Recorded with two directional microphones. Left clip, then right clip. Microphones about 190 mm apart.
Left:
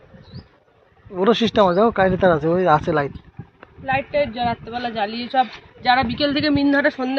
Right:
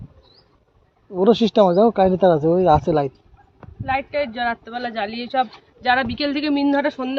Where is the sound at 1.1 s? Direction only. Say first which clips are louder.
Right 1 dB; 45° right (ahead or behind).